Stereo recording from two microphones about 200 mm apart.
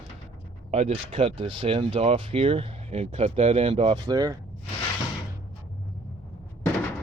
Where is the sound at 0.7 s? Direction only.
35° right (ahead or behind).